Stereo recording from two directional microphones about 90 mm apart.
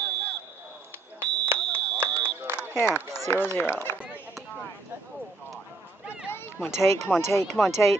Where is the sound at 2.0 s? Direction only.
40° right (ahead or behind).